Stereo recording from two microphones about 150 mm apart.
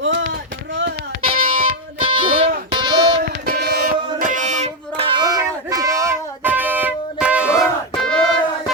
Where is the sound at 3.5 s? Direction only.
90° right; by 5.1 s 50° right (ahead or behind).